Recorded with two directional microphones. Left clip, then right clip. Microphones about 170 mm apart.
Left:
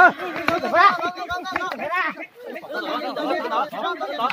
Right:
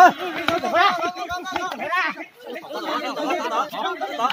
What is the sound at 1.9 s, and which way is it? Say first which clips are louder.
Speech: right 2 dB; 45° left (ahead or behind).